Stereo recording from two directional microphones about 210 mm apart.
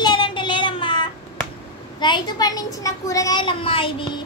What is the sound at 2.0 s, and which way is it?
A child's voice, 20° left (ahead or behind).